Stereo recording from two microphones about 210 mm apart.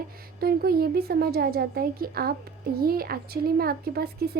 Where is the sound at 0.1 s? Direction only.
45° right (ahead or behind).